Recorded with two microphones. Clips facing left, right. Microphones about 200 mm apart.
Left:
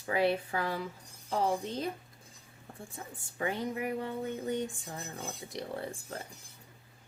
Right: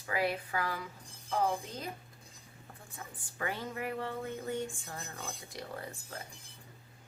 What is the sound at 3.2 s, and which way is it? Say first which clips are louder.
Speech: left 4 dB; 25° left (ahead or behind).